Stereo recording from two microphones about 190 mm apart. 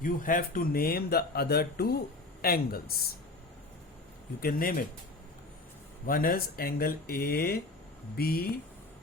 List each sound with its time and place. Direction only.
0.0 s speech: 45° left (ahead or behind)
4.4 s speech: 50° left (ahead or behind)
6.1 s speech: 50° left (ahead or behind)